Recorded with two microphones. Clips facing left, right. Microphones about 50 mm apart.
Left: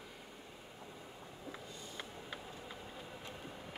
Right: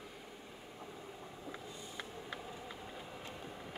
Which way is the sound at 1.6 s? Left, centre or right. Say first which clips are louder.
Right 1 dB; centre.